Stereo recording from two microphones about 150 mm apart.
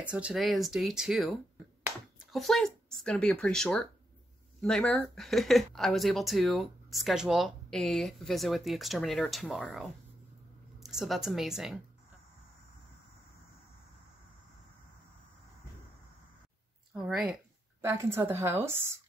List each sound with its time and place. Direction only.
0.0 s speech: 5° right (ahead or behind)
2.3 s a woman's voice: centre (ahead or behind)
16.9 s a woman's voice: 5° right (ahead or behind)
17.8 s a woman's voice: 15° right (ahead or behind)